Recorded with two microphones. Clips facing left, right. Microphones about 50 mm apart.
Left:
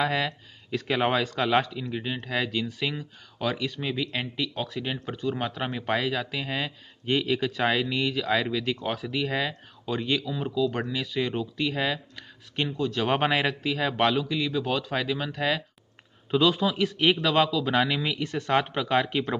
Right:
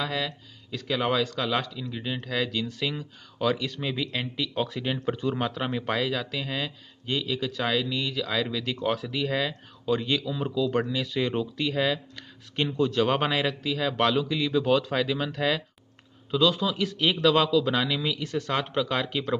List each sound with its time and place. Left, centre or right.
0.0 s speech: left; by 4.5 s centre
4.6 s speech: centre
5.4 s speech: centre
7.1 s speech: left
8.8 s speech: centre
13.1 s speech: left
14.0 s speech: centre
16.3 s speech: left
17.7 s speech: left